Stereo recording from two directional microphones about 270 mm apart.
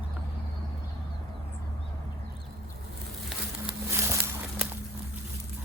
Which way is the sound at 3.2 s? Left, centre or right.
Centre.